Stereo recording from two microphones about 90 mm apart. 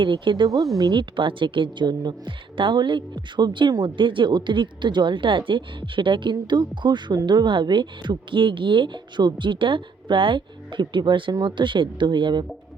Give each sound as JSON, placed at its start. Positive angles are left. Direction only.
{"t": 0.0, "sound": "a woman's voice", "side_deg": -65}
{"t": 1.1, "sound": "a woman's voice", "side_deg": -70}